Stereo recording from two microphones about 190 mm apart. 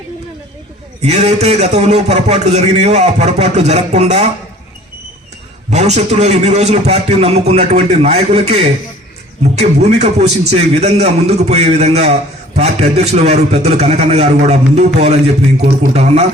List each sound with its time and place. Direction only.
1.0 s a man's voice: 35° right (ahead or behind)
5.7 s a man's voice: 35° right (ahead or behind)